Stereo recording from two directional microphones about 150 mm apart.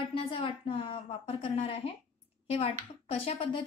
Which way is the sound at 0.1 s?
35° left (ahead or behind).